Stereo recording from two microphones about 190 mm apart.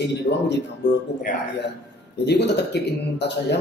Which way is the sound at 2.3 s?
60° left (ahead or behind).